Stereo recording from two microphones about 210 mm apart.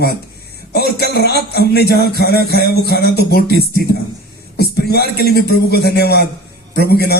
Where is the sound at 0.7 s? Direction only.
50° left (ahead or behind).